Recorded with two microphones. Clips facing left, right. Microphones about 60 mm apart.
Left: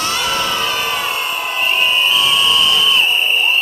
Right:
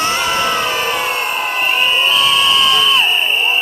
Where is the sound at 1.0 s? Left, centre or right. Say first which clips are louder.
Right 2 dB; right.